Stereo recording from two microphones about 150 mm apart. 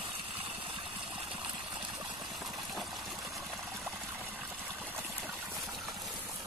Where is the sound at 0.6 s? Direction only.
35° right (ahead or behind).